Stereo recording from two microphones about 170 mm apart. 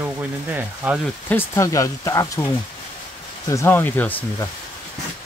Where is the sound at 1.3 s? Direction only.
15° left (ahead or behind).